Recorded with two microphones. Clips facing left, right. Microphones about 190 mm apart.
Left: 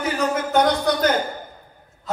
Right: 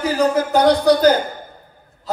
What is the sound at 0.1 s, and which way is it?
A man's voice, 35° right (ahead or behind).